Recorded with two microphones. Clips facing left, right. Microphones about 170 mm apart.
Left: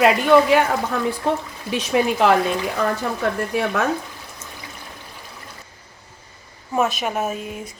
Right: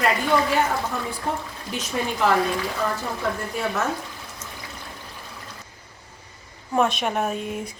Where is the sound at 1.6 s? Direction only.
80° left.